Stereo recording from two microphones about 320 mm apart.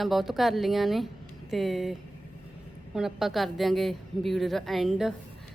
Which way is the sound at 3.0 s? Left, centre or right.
Centre.